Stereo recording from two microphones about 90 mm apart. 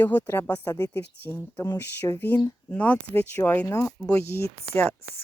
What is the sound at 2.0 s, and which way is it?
Speech, 40° left (ahead or behind).